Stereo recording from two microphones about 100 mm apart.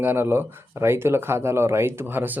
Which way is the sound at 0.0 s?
20° right (ahead or behind).